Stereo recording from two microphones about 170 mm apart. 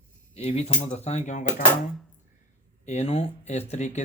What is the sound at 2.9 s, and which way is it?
Speech, 40° left (ahead or behind).